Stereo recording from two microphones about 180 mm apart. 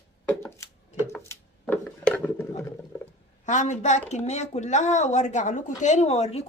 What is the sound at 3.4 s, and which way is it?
Speech, 40° left (ahead or behind).